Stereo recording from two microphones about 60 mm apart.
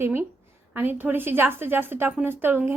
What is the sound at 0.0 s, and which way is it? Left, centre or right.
A woman's voice, right.